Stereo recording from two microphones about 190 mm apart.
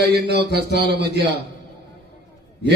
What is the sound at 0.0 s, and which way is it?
A man's voice, 60° right (ahead or behind).